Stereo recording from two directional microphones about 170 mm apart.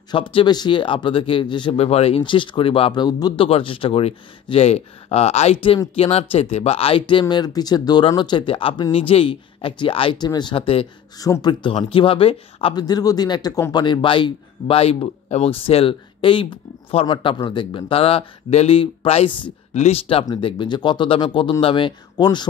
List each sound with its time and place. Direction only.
0.1 s speech: 30° left (ahead or behind)
11.1 s speech: 20° left (ahead or behind)